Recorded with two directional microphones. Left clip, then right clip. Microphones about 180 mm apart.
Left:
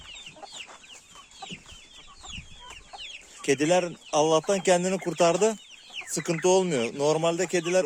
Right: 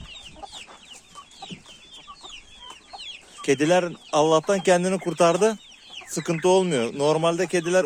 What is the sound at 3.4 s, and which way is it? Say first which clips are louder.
Speech: right 3 dB; 10° left (ahead or behind).